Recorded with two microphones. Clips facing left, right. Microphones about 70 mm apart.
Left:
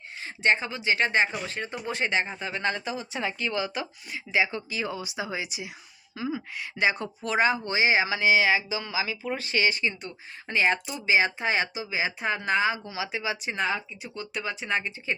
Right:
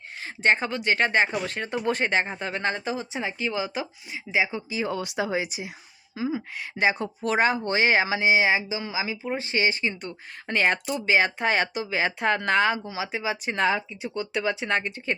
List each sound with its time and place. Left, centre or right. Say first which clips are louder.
0.2 s a sound: right 2 dB; right
0.7 s speech: right 2 dB; right
1.5 s speech: right 5 dB; right
1.9 s speech: right 3 dB; right
3.1 s speech: right 1 dB; right
4.9 s speech: right 5 dB; right
6.1 s speech: right 3 dB; centre
6.5 s speech: even; right
8.0 s speech: right 1 dB; right
10.5 s speech: right 1 dB; right
12.8 s speech: right 2 dB; right
13.6 s speech: right 5 dB; right